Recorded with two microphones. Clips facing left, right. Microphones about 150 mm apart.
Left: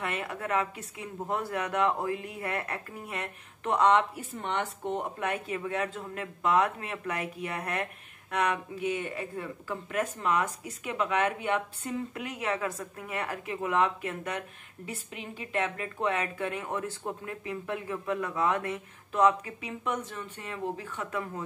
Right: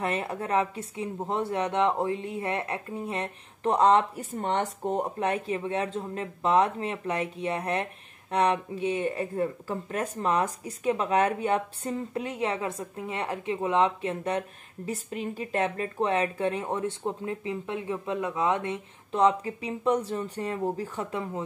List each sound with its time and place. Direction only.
0.0 s speech: 35° right (ahead or behind)
14.9 s speech: 40° right (ahead or behind)